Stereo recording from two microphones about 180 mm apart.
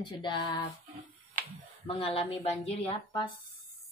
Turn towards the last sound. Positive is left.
turn(degrees=30)  # may be behind; listen again after turning